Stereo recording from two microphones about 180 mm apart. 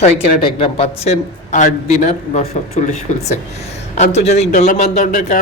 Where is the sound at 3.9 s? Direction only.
40° left (ahead or behind).